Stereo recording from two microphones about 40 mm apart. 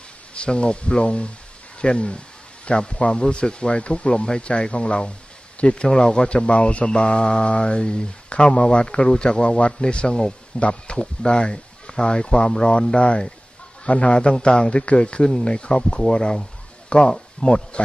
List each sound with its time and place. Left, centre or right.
0.3 s speech: left
15.2 s speech: centre
15.5 s speech: left